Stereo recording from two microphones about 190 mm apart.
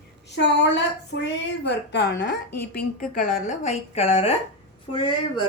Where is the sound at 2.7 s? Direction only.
45° left (ahead or behind).